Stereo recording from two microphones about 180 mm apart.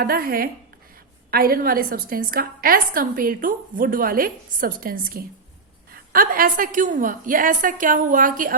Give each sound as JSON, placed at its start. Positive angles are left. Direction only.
{"t": 0.0, "sound": "a woman's voice", "side_deg": -55}